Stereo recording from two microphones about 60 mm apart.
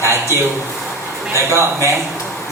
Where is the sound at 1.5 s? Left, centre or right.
Right.